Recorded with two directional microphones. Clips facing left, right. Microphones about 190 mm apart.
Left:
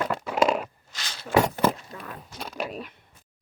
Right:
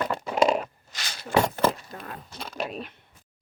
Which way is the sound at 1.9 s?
40° right (ahead or behind).